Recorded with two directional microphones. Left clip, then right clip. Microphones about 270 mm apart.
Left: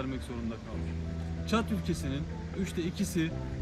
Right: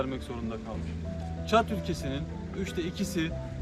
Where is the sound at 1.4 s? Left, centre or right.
Centre.